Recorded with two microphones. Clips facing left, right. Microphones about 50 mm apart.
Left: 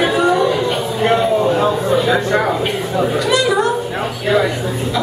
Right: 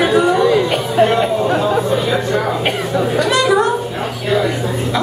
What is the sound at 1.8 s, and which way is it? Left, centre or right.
Speech, centre.